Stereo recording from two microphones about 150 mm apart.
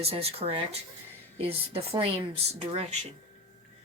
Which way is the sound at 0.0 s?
45° right (ahead or behind).